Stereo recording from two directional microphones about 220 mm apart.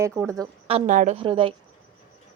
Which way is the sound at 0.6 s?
30° right (ahead or behind).